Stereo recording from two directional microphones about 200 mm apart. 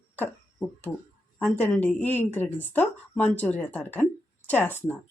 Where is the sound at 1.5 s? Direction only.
10° left (ahead or behind).